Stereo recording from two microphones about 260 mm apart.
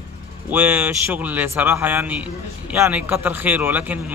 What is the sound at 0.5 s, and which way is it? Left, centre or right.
Speech, centre.